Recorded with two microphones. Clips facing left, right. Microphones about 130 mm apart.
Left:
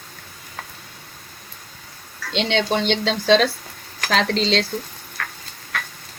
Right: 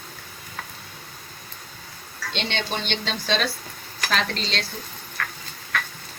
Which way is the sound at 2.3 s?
90° left.